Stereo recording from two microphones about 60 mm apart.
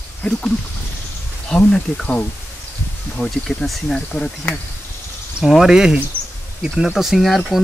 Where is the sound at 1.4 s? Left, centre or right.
Centre.